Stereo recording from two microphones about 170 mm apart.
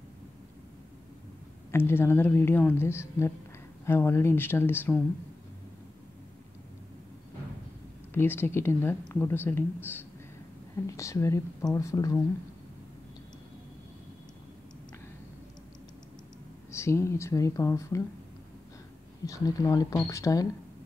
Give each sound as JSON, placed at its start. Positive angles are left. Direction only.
{"t": 1.7, "sound": "speech", "side_deg": 15}
{"t": 8.1, "sound": "speech", "side_deg": 15}
{"t": 16.7, "sound": "speech", "side_deg": 15}
{"t": 19.2, "sound": "speech", "side_deg": 20}